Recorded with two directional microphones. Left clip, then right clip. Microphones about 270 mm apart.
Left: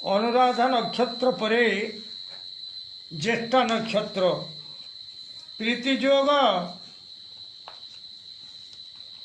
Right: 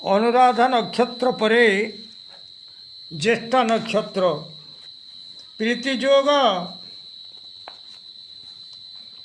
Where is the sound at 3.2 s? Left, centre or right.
Right.